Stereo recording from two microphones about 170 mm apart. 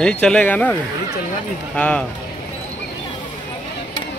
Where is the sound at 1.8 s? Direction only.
5° left (ahead or behind).